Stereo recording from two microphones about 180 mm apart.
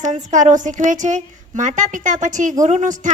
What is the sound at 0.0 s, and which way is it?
A woman's voice, 45° right (ahead or behind).